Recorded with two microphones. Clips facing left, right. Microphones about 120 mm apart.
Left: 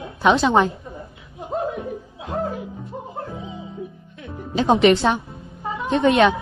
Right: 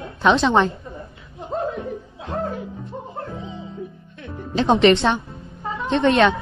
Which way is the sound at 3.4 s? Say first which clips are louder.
Even; 5° left (ahead or behind).